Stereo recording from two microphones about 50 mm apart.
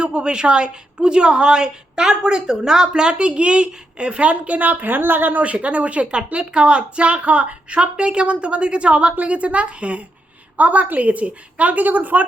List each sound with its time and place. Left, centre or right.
0.0 s a woman's voice: centre; by 5.4 s right
5.4 s a woman's voice: right